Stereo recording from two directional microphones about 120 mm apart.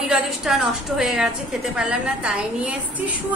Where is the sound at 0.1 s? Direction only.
5° right (ahead or behind).